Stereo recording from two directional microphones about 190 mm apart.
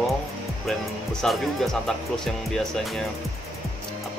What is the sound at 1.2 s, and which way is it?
Speech, centre (ahead or behind).